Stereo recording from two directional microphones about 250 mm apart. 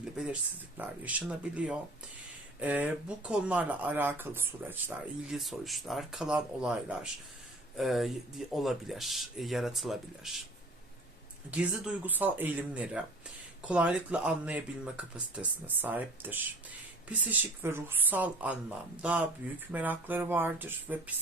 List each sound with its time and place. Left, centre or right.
0.0 s speech: centre
11.5 s speech: centre